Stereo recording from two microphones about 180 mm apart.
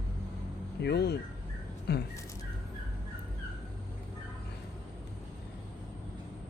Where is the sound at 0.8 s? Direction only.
65° left (ahead or behind).